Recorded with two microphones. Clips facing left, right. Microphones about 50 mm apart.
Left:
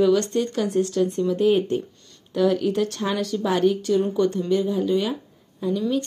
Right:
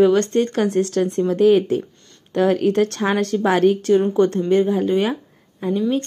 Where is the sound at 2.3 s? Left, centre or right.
Right.